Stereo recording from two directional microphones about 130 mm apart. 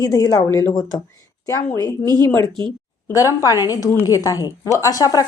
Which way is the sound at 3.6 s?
20° left (ahead or behind).